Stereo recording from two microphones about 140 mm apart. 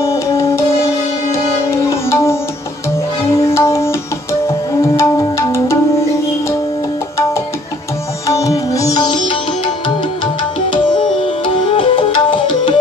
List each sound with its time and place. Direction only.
0.0 s music: 20° left (ahead or behind)
2.0 s music: 20° left (ahead or behind)
3.4 s music: 20° left (ahead or behind)
8.3 s music: 25° left (ahead or behind)
10.7 s tabla: 35° left (ahead or behind)